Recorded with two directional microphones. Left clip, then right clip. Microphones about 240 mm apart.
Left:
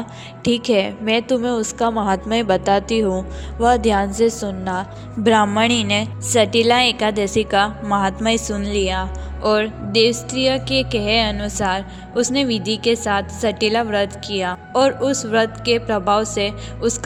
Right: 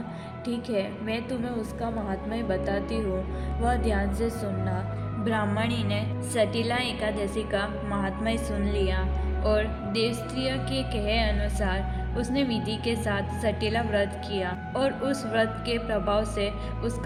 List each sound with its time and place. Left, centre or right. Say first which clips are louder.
0.4 s a woman's voice: left 12 dB; left